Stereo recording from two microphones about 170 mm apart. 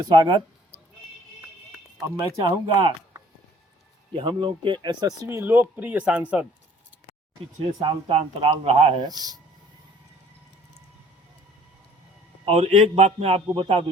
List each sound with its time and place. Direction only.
0.0 s speech: 25° right (ahead or behind)
2.1 s speech: 25° right (ahead or behind); by 6.5 s 5° right (ahead or behind)
7.8 s speech: 30° right (ahead or behind)
9.0 s speech: 25° right (ahead or behind)
12.5 s speech: 35° right (ahead or behind)